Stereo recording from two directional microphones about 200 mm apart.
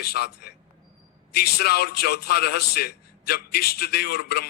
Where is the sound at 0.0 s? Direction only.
50° left (ahead or behind).